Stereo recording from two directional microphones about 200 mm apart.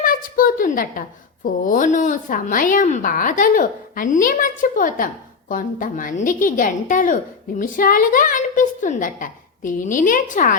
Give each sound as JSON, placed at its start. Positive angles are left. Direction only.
{"t": 0.0, "sound": "a woman's voice", "side_deg": 45}